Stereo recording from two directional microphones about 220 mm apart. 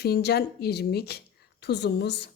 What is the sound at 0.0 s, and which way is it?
A woman's voice, 50° left (ahead or behind).